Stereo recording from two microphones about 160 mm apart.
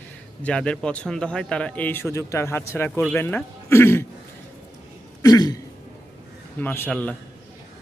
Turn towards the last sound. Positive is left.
turn(degrees=10)  # may be behind; listen again after turning